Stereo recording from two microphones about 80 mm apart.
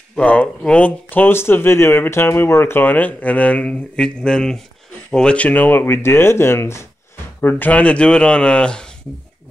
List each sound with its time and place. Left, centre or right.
0.2 s speech: centre